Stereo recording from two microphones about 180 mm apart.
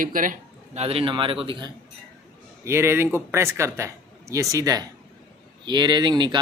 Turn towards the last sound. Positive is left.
turn(degrees=-25)  # may be behind; listen again after turning